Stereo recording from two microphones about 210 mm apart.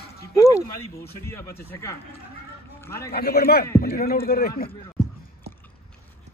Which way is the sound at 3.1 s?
45° left (ahead or behind).